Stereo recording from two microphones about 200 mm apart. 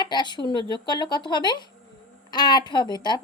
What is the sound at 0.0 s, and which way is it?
Speech, 20° left (ahead or behind).